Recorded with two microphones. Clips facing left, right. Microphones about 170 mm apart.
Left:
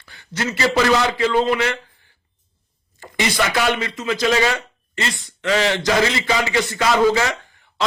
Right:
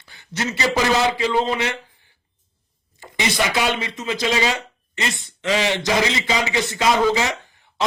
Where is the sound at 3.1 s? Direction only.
20° right (ahead or behind).